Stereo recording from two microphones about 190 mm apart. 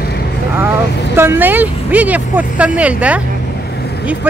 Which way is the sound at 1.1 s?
10° right (ahead or behind).